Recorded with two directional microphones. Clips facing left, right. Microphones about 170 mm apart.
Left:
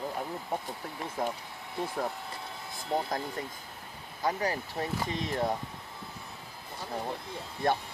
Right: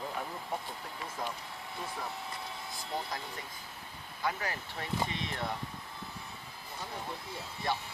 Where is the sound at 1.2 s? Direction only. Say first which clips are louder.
Left 6 dB; 55° left (ahead or behind).